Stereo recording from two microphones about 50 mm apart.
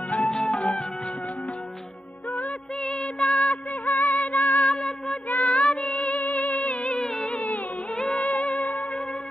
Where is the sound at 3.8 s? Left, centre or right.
Left.